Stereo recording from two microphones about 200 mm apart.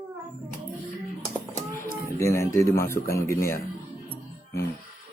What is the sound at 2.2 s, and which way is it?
A man's voice, 15° left (ahead or behind).